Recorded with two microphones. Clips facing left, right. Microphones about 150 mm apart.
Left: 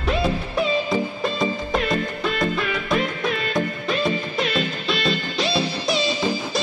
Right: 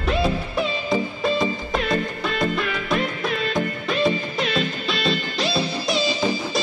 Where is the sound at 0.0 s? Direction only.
Centre (ahead or behind).